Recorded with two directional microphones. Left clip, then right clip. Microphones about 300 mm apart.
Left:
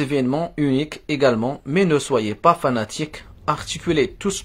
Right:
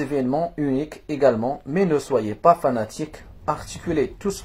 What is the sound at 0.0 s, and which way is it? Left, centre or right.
Speech, left.